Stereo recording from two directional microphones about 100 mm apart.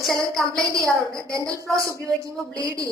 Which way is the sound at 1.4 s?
35° right (ahead or behind).